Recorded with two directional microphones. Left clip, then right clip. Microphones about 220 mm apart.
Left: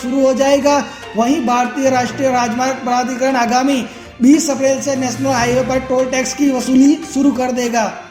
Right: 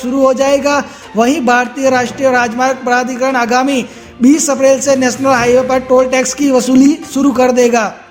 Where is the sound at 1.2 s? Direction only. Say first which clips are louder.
Right 4 dB; 45° right (ahead or behind).